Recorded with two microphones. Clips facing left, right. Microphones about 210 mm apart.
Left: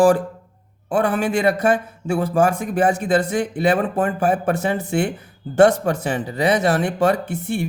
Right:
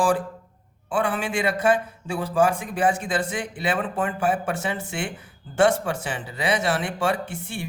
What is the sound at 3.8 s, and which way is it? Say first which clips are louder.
Speech: left 5 dB; 40° left (ahead or behind).